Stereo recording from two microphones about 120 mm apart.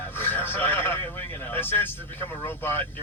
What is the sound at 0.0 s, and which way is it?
A man's voice, 15° left (ahead or behind).